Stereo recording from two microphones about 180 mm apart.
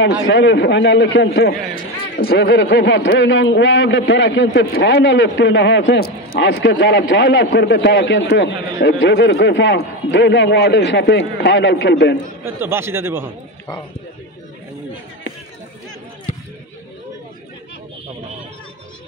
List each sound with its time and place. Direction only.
0.0 s a man's voice: 85° left
12.4 s speech: 15° right (ahead or behind)